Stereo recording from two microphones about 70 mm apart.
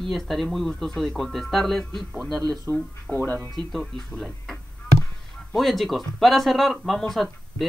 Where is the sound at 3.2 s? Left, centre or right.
Left.